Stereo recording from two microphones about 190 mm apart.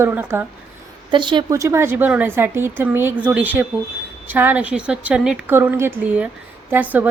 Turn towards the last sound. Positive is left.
turn(degrees=-10)  # may be behind; listen again after turning